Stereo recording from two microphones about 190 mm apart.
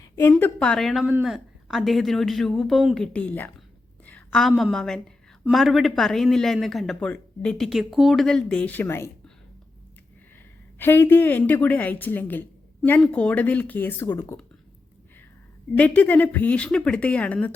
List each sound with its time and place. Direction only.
0.0 s a woman's voice: 15° left (ahead or behind)
10.8 s a woman's voice: 10° left (ahead or behind)
15.8 s a woman's voice: 10° left (ahead or behind)